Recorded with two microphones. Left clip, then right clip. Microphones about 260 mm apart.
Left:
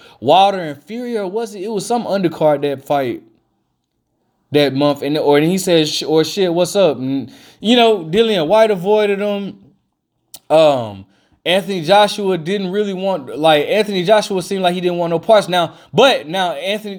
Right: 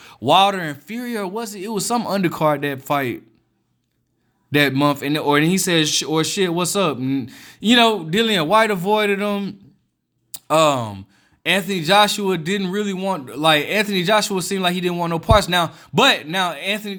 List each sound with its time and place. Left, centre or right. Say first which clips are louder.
0.0 s a man's voice: left 4 dB; right
4.5 s a man's voice: left 3 dB; right